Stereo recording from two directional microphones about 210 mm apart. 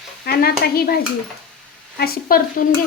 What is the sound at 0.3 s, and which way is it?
Stir, 45° left (ahead or behind).